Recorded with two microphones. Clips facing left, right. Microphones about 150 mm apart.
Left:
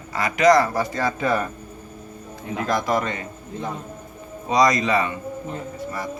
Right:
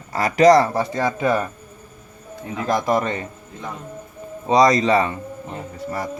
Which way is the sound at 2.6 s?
25° right (ahead or behind).